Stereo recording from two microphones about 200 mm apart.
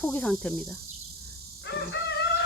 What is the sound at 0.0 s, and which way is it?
Speech, 5° left (ahead or behind).